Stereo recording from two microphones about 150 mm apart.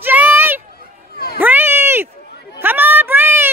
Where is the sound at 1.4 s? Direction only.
10° right (ahead or behind).